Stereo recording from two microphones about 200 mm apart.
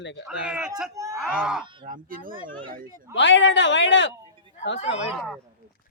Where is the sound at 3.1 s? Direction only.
65° left (ahead or behind).